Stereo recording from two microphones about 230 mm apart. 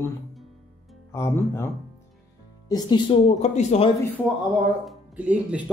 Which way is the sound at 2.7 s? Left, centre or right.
Centre.